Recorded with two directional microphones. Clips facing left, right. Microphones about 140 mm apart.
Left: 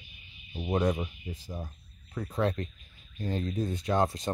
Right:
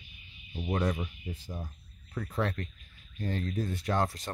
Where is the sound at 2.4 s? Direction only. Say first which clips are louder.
Left 5 dB; 20° left (ahead or behind).